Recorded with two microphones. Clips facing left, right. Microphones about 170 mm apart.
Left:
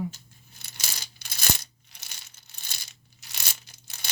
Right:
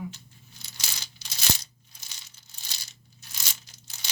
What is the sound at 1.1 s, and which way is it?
Coin, 55° left (ahead or behind).